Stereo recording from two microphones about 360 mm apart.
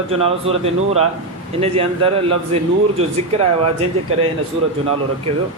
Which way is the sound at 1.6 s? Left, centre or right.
Centre.